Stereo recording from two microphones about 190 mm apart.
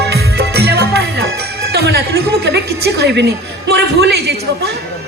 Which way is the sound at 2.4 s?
60° right (ahead or behind).